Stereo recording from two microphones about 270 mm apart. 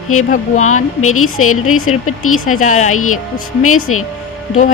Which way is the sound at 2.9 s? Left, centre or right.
Left.